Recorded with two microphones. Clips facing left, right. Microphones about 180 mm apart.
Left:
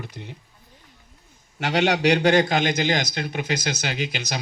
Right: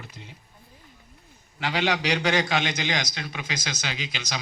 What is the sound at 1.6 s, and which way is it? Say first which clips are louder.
A man's voice: left 6 dB; 70° left (ahead or behind).